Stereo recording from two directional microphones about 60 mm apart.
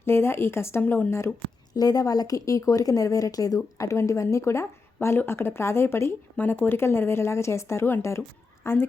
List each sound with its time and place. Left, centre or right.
0.0 s a woman's voice: left
0.8 s speech: left
1.7 s speech: left
4.9 s a woman's voice: left
6.3 s a woman's voice: left